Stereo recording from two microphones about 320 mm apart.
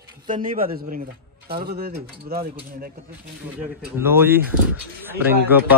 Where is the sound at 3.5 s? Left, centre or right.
Centre.